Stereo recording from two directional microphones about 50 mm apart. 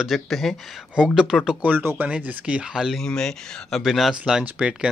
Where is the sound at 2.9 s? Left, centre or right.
Centre.